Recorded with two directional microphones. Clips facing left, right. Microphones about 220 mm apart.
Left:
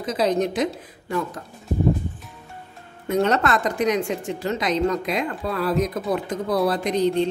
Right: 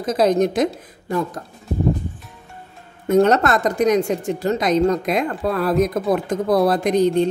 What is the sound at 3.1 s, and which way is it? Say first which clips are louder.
A woman's voice: right 5 dB; 45° right (ahead or behind).